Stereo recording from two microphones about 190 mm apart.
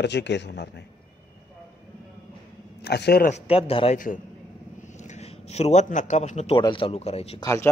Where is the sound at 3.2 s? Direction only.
35° left (ahead or behind).